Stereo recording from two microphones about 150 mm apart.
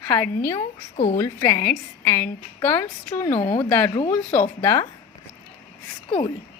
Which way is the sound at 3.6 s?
10° left (ahead or behind).